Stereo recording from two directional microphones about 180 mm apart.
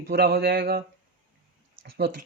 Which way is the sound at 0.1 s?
65° right (ahead or behind).